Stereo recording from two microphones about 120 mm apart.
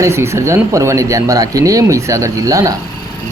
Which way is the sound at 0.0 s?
25° right (ahead or behind).